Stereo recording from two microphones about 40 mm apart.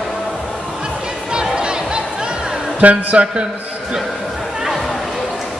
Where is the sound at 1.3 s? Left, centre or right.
Right.